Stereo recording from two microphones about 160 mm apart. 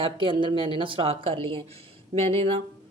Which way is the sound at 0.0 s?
30° right (ahead or behind).